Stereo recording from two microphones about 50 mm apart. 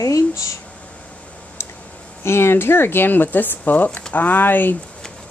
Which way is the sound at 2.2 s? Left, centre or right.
Left.